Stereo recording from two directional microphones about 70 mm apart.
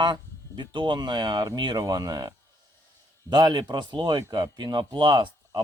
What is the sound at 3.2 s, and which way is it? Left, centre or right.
Speech, right.